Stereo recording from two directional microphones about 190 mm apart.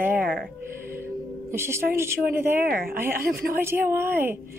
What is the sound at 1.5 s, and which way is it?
Speech, 15° right (ahead or behind).